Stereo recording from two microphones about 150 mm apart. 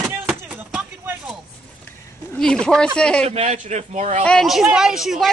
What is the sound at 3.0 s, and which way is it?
Speech, 5° left (ahead or behind).